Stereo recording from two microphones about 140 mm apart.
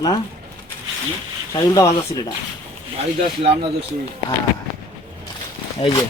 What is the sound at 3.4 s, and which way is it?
Speech, 40° right (ahead or behind).